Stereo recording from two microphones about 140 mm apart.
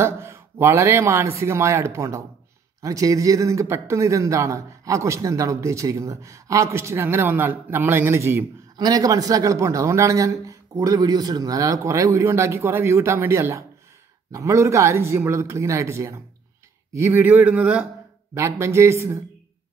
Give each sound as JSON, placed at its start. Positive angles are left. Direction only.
{"t": 0.0, "sound": "a man's voice", "side_deg": -20}